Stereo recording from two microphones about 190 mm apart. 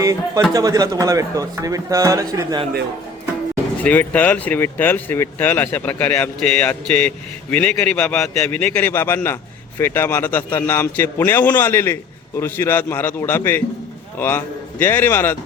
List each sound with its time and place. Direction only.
0.0 s a man's voice: 15° right (ahead or behind)
3.8 s a man's voice: 10° left (ahead or behind)